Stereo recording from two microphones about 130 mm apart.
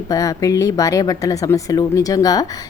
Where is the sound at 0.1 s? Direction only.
25° left (ahead or behind).